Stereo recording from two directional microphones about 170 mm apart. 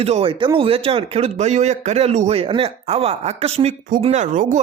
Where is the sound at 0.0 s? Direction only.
35° right (ahead or behind).